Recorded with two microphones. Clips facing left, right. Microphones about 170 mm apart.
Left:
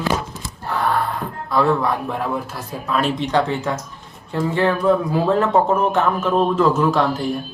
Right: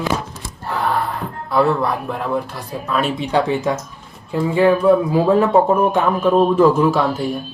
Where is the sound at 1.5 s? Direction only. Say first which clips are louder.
Right 1 dB; 5° right (ahead or behind).